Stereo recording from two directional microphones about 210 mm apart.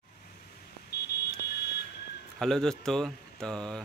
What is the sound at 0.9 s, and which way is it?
Buzzer, 50° left (ahead or behind).